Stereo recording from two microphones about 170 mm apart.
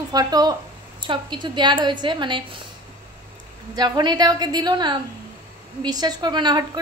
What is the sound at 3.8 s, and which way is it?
A woman's voice, 25° right (ahead or behind).